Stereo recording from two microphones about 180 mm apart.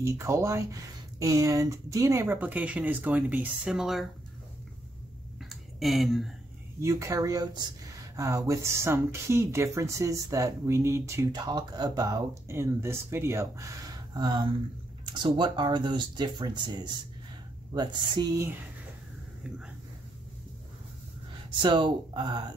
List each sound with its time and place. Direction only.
0.0 s speech: 15° right (ahead or behind)
5.4 s a sound: centre (ahead or behind)
6.8 s speech: 20° right (ahead or behind)
21.5 s speech: 25° right (ahead or behind)